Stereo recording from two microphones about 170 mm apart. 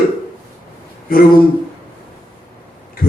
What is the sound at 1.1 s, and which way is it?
Speech, 60° left (ahead or behind).